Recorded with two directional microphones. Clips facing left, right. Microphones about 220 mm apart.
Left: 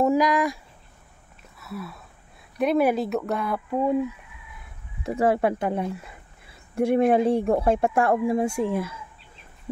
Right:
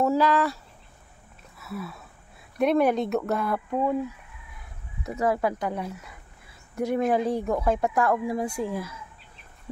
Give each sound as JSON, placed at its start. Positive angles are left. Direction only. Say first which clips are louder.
{"t": 0.0, "sound": "speech", "louder": "left 2 dB", "side_deg": 15}
{"t": 1.6, "sound": "speech", "louder": "even", "side_deg": 0}
{"t": 5.0, "sound": "speech", "louder": "left 4 dB", "side_deg": 30}